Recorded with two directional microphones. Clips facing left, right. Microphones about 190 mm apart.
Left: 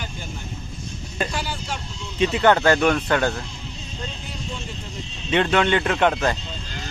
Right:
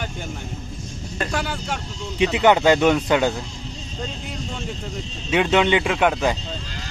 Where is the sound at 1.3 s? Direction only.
55° right (ahead or behind).